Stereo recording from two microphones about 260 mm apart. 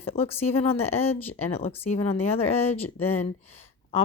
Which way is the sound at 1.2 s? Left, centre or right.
Centre.